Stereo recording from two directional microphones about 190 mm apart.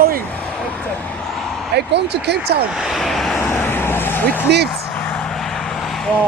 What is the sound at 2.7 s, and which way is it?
Vehicle, centre (ahead or behind).